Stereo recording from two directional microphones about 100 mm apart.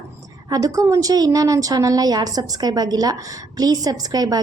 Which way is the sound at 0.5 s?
35° right (ahead or behind).